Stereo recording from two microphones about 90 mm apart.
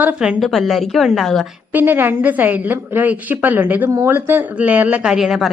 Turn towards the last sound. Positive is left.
turn(degrees=0)  # may be behind; listen again after turning